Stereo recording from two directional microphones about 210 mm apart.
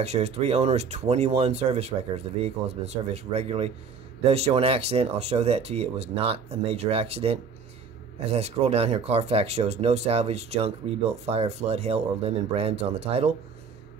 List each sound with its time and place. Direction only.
0.0 s speech: 30° right (ahead or behind)